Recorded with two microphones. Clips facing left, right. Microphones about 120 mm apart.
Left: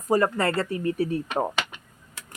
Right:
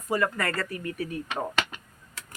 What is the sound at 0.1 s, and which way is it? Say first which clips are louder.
Speech: left 5 dB; 30° left (ahead or behind).